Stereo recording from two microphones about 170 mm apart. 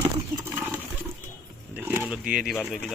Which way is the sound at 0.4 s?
10° right (ahead or behind).